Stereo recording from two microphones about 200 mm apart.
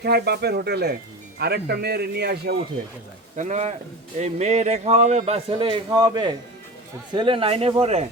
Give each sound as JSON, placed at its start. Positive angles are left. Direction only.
{"t": 0.0, "sound": "a man's voice", "side_deg": -55}
{"t": 3.3, "sound": "a man's voice", "side_deg": -35}